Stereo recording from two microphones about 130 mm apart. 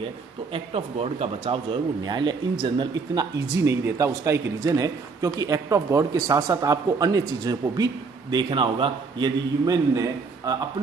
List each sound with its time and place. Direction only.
0.5 s a man's voice: 50° right (ahead or behind); by 10.6 s 25° right (ahead or behind)